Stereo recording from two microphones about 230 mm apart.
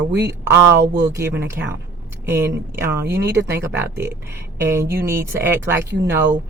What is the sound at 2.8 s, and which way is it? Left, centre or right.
Speech, centre.